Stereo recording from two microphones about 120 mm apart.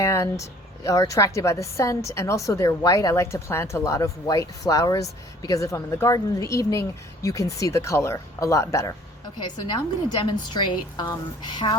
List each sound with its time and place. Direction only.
0.0 s a woman's voice: 25° left (ahead or behind)
9.6 s a woman's voice: 40° left (ahead or behind)